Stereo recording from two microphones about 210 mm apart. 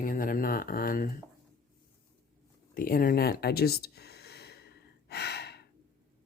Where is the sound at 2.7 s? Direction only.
45° left (ahead or behind).